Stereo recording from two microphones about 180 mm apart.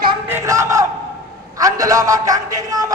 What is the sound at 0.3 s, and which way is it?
Battle cry, 15° right (ahead or behind).